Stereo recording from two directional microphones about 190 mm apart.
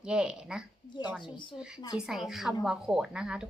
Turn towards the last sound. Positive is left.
turn(degrees=-5)  # may be behind; listen again after turning